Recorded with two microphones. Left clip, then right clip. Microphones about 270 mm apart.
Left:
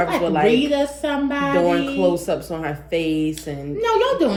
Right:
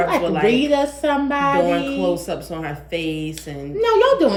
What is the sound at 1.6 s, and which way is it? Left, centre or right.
Speech, centre.